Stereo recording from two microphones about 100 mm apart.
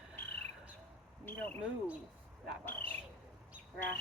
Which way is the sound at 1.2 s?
20° left (ahead or behind).